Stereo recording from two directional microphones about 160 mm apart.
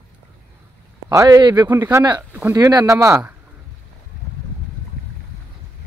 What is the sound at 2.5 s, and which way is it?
Speech, 25° right (ahead or behind).